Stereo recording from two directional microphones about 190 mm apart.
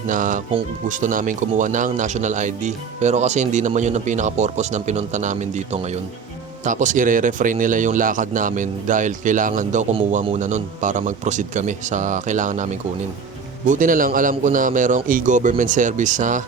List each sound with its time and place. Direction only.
0.1 s speech: 45° right (ahead or behind)
13.7 s speech: 45° right (ahead or behind)